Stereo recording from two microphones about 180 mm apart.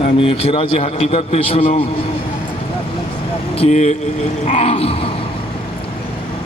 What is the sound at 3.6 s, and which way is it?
A man's voice, 40° left (ahead or behind).